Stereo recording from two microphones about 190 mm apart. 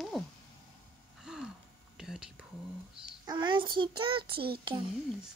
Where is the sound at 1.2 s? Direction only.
5° right (ahead or behind).